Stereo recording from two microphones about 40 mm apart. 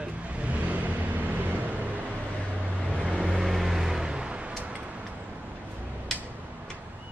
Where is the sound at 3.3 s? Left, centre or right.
Centre; by 4.6 s right.